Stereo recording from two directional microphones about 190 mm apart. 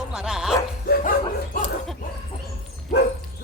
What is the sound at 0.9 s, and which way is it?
Dog, 45° left (ahead or behind).